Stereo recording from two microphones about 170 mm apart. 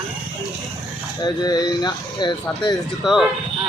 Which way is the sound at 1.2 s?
25° left (ahead or behind).